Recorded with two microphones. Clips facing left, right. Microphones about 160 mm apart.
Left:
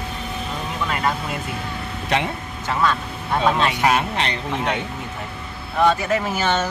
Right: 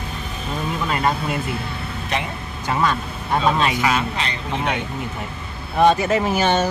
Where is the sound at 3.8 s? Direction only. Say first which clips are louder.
Left 2 dB; 55° left (ahead or behind).